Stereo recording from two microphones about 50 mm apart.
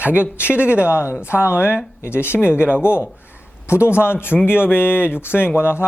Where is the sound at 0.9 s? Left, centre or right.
Left.